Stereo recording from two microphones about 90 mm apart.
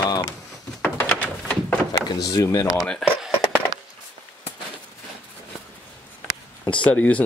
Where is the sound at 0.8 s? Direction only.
20° left (ahead or behind).